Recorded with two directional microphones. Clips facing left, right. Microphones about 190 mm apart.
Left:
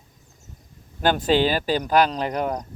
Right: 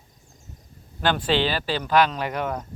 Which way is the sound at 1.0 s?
45° left (ahead or behind).